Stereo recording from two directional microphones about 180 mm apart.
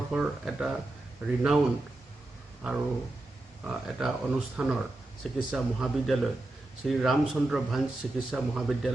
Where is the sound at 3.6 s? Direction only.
Centre (ahead or behind).